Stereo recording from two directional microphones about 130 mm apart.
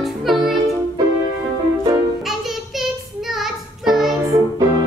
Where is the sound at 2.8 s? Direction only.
Centre (ahead or behind).